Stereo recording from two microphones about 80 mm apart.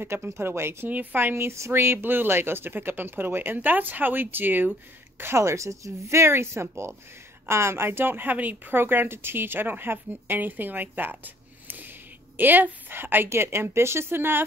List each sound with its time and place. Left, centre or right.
0.0 s speech: right